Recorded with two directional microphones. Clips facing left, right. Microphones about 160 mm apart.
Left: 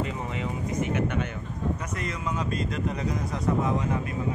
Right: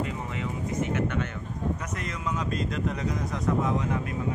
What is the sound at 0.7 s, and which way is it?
Speech, 15° left (ahead or behind).